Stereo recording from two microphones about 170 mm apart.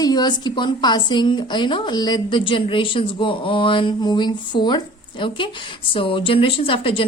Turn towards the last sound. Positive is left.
turn(degrees=30)  # may be behind; listen again after turning